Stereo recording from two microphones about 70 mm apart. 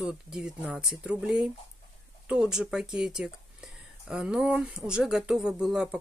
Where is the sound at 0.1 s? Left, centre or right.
Centre.